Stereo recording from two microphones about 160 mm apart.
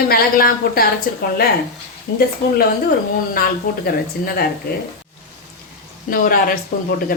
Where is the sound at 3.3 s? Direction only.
70° left (ahead or behind).